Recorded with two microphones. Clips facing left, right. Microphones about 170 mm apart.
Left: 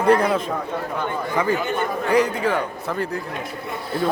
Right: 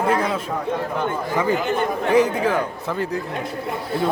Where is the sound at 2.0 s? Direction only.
20° right (ahead or behind).